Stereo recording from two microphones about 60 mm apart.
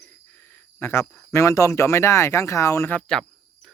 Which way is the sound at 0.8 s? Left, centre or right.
Left.